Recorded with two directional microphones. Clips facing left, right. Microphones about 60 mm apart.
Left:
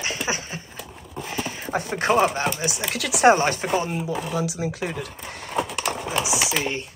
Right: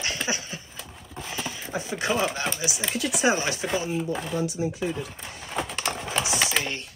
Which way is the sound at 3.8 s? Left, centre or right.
Left.